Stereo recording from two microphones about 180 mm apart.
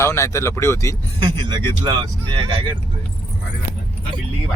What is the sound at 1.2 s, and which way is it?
Speech, 25° right (ahead or behind).